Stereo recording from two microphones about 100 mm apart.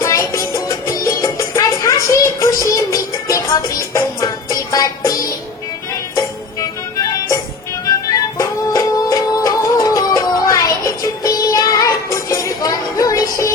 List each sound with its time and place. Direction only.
0.0 s music: 30° left (ahead or behind)